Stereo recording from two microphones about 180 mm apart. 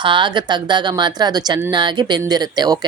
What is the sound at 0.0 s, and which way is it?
Speech, 25° right (ahead or behind).